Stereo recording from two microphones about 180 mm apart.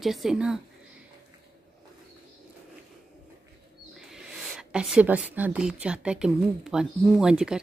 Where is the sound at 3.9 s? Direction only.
Centre (ahead or behind).